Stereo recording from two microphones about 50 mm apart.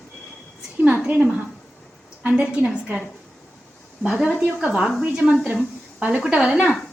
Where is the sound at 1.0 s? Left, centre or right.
Right.